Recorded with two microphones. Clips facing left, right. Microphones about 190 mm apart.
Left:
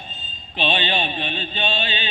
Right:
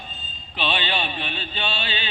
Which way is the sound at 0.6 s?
20° left (ahead or behind).